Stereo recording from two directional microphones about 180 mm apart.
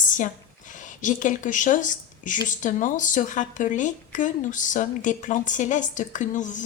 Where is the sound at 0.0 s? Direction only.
45° left (ahead or behind).